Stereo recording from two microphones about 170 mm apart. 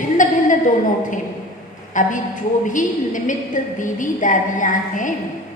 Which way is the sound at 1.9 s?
50° left (ahead or behind).